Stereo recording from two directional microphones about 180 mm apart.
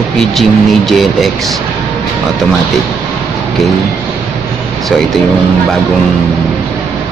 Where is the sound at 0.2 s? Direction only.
Centre (ahead or behind).